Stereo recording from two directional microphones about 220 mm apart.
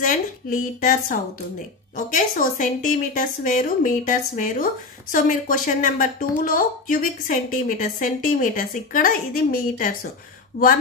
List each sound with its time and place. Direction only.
0.0 s speech: 35° left (ahead or behind)